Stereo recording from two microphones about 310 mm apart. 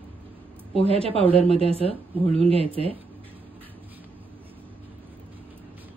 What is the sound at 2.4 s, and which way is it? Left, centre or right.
Speech, centre.